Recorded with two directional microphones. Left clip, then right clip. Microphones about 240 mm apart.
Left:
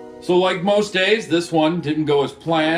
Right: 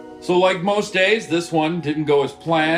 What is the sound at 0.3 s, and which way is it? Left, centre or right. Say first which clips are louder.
Speech: even; centre.